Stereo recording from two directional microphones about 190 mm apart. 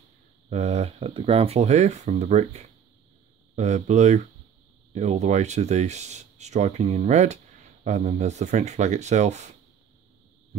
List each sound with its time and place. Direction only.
0.5 s speech: 35° right (ahead or behind)